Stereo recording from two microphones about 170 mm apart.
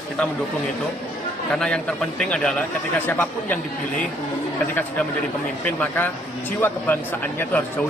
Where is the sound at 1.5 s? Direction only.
5° left (ahead or behind).